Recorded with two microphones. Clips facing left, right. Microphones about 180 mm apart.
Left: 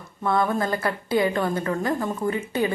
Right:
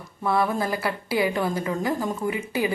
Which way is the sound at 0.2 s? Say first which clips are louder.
Left 1 dB; 5° right (ahead or behind).